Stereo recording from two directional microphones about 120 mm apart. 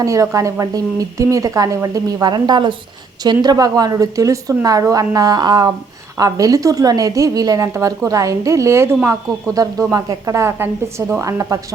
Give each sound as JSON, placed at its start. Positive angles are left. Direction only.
{"t": 0.0, "sound": "a woman's voice", "side_deg": -25}